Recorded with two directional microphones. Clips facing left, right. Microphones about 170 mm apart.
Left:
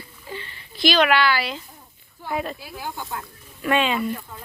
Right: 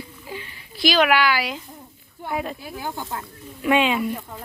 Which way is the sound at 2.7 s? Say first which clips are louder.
Right 2 dB; 20° right (ahead or behind).